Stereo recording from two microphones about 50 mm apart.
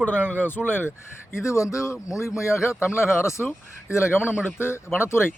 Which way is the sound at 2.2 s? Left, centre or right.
Left.